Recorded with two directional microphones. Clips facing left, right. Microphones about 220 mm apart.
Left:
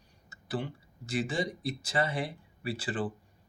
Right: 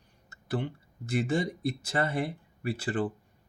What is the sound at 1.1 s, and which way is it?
Speech, 60° right (ahead or behind).